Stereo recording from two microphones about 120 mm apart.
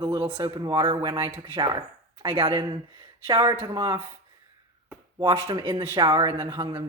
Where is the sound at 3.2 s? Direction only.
35° right (ahead or behind).